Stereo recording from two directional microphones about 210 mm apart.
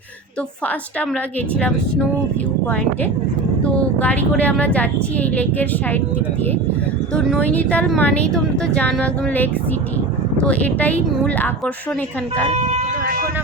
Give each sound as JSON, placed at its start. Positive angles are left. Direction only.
{"t": 3.6, "sound": "a woman's voice", "side_deg": 5}
{"t": 7.3, "sound": "a woman's voice", "side_deg": 5}
{"t": 12.5, "sound": "speech", "side_deg": -30}